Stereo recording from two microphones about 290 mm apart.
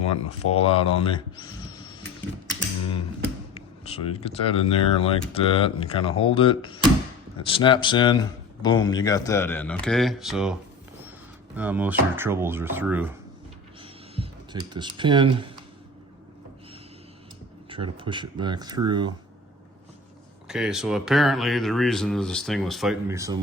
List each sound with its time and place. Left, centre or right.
0.3 s speech: centre
3.5 s speech: left; by 13.1 s centre
14.2 s speech: centre
17.7 s speech: centre
20.5 s speech: centre